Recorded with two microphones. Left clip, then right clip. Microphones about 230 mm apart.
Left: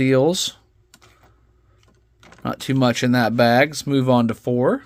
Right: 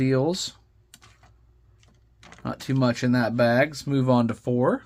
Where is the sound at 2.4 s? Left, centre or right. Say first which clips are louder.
Left 5 dB; left.